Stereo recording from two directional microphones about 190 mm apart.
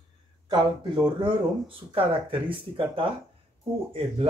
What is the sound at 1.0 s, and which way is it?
Speech, 25° right (ahead or behind).